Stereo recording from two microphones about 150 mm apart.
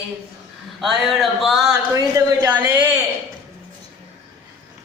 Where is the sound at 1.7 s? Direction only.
25° right (ahead or behind).